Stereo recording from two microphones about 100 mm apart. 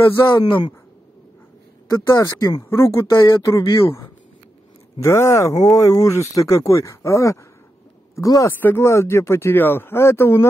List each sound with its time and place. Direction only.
0.3 s speech: 45° left (ahead or behind)
1.9 s speech: 35° left (ahead or behind)
8.5 s speech: 20° left (ahead or behind)